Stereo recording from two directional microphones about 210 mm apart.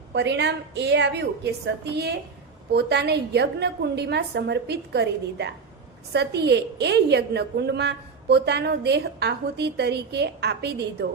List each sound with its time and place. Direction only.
0.1 s a woman's voice: 55° right (ahead or behind)